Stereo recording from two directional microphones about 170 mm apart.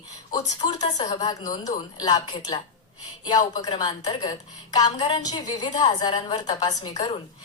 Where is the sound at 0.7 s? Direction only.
40° left (ahead or behind).